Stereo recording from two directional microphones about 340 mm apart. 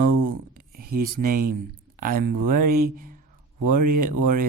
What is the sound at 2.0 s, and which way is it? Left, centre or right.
Speech, right.